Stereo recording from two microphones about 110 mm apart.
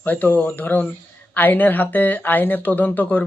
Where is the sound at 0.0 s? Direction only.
15° left (ahead or behind).